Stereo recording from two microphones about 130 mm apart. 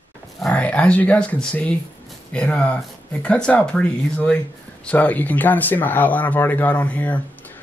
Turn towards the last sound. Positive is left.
turn(degrees=10)  # may be behind; listen again after turning